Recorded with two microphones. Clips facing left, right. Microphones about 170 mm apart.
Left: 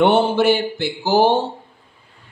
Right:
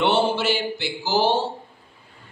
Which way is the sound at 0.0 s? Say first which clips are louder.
Left 6 dB; 55° left (ahead or behind).